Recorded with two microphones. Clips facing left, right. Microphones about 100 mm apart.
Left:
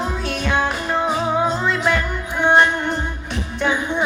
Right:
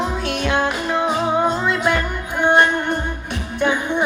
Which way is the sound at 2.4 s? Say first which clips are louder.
Even; 50° right (ahead or behind).